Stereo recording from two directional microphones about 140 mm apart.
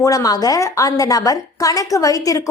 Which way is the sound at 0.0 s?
25° left (ahead or behind).